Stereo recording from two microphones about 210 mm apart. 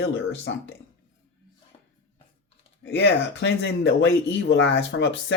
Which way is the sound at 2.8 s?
60° left (ahead or behind).